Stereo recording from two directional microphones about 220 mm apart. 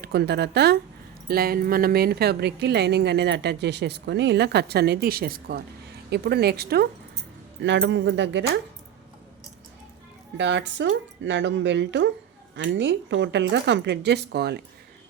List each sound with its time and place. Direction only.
0.0 s a woman's voice: 45° right (ahead or behind)
10.3 s a woman's voice: 55° right (ahead or behind)